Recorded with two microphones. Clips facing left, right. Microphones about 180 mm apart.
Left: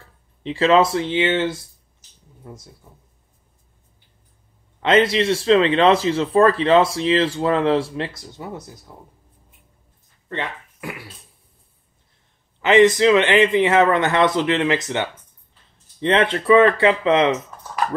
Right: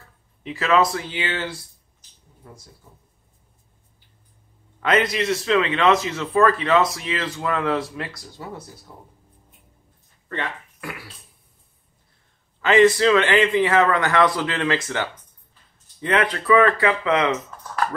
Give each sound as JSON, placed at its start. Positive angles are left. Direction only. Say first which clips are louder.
{"t": 0.0, "sound": "speech", "louder": "left 5 dB", "side_deg": 30}
{"t": 4.7, "sound": "speech", "louder": "left 4 dB", "side_deg": 25}
{"t": 10.2, "sound": "speech", "louder": "left 1 dB", "side_deg": 20}
{"t": 12.5, "sound": "speech", "louder": "left 2 dB", "side_deg": 20}